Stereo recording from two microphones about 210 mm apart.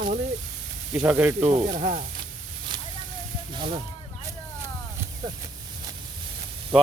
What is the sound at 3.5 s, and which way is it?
Speech, 25° right (ahead or behind).